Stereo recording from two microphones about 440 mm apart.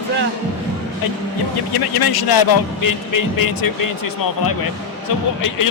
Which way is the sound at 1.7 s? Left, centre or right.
Left.